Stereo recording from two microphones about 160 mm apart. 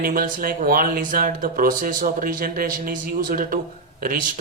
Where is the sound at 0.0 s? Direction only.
60° right (ahead or behind).